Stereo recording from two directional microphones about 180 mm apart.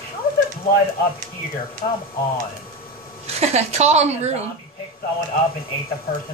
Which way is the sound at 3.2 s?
35° right (ahead or behind).